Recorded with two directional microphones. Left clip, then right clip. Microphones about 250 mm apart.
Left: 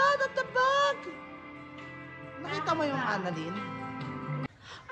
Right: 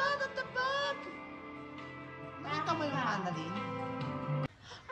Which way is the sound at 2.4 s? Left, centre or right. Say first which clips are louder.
Left 4 dB; centre.